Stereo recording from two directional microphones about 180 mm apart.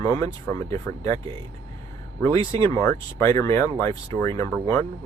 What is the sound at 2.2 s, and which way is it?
Speech, 15° left (ahead or behind).